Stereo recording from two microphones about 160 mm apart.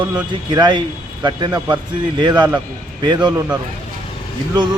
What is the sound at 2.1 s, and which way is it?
Speech, 30° right (ahead or behind).